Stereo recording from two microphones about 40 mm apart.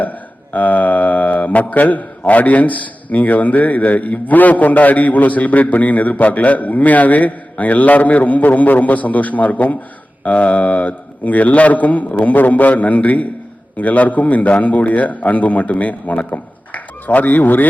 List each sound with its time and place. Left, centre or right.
0.0 s speech: left